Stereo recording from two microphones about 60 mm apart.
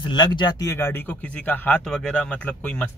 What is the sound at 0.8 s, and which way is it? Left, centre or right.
Speech, left.